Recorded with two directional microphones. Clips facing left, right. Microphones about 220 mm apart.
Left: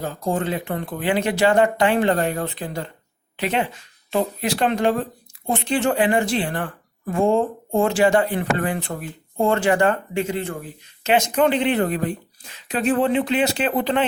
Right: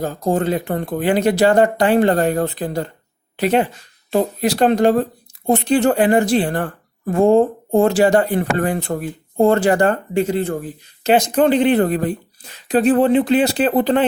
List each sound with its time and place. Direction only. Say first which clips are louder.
0.0 s a woman's voice: right 5 dB; 40° right (ahead or behind)